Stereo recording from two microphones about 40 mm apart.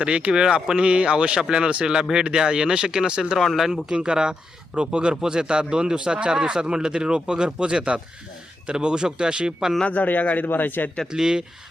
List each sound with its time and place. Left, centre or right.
0.0 s a man's voice: right
3.3 s speech: centre
3.8 s a man's voice: right
9.8 s speech: left
11.1 s speech: centre